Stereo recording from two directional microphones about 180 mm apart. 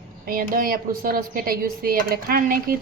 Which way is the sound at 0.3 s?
55° right (ahead or behind).